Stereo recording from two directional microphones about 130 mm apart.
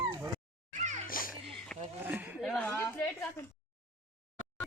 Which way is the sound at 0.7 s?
65° right (ahead or behind).